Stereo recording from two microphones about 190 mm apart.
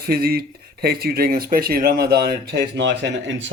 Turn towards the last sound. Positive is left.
turn(degrees=-70)  # may be behind; listen again after turning